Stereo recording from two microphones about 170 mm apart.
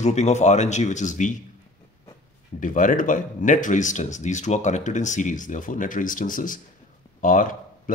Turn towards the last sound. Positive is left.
turn(degrees=50)  # may be behind; listen again after turning